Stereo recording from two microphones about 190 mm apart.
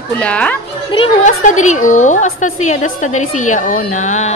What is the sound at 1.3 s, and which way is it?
A woman's voice, 40° left (ahead or behind).